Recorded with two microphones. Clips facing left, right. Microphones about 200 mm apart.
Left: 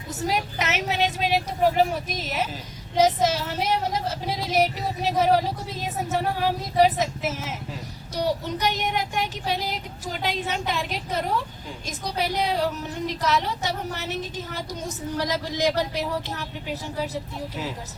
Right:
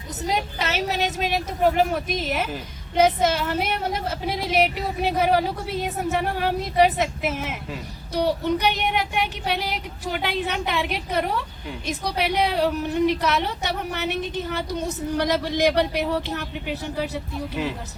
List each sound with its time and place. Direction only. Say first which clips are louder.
0.2 s a woman's voice: right 1 dB; 20° right (ahead or behind); by 17.1 s 60° right (ahead or behind)